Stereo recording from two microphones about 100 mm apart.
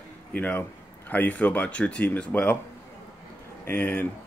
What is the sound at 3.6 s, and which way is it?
Speech, 20° left (ahead or behind).